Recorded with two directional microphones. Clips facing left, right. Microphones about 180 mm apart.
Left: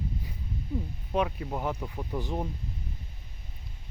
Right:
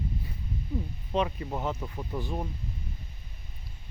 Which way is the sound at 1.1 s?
5° left (ahead or behind).